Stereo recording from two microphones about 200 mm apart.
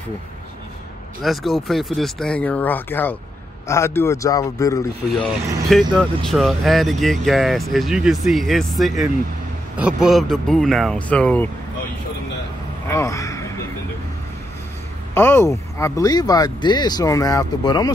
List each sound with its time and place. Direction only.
1.2 s speech: centre (ahead or behind)
5.7 s speech: centre (ahead or behind)
12.8 s a sound: 15° left (ahead or behind)
15.1 s speech: 10° left (ahead or behind)